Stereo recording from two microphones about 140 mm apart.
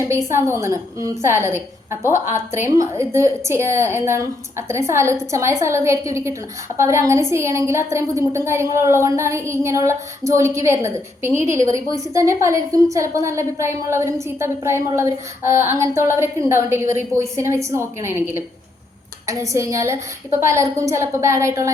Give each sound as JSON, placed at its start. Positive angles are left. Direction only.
{"t": 0.0, "sound": "a woman's voice", "side_deg": -20}